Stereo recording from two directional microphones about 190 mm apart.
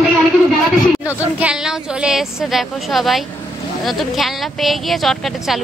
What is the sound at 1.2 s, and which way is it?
Speech, 5° right (ahead or behind).